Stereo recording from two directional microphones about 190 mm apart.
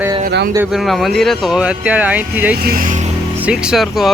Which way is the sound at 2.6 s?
50° right (ahead or behind).